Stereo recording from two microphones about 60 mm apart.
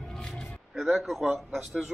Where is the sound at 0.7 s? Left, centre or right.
Centre.